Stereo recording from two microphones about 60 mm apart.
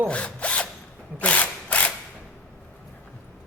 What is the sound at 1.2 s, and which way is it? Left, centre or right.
Mechanisms, left.